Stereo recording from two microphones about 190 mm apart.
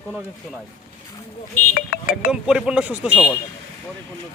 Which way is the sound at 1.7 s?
50° left (ahead or behind).